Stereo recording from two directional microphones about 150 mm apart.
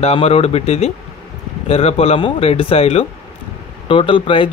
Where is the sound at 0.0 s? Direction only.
40° left (ahead or behind).